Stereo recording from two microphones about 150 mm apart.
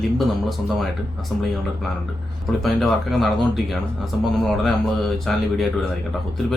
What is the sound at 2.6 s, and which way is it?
Speech, centre (ahead or behind).